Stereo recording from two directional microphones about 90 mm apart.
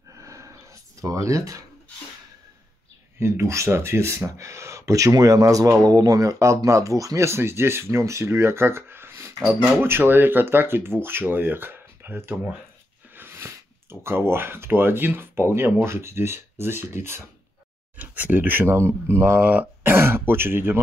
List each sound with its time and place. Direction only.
0.2 s a sound: 35° right (ahead or behind)
1.0 s speech: 35° right (ahead or behind)
3.2 s speech: 30° right (ahead or behind)